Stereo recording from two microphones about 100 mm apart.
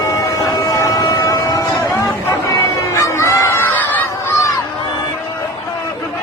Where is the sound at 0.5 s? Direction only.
35° left (ahead or behind); by 4.0 s 15° left (ahead or behind).